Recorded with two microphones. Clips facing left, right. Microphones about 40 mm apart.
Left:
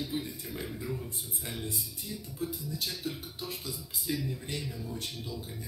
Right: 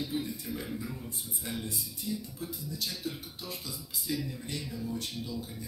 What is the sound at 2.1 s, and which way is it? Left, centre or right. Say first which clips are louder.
Speech: right 7 dB; centre.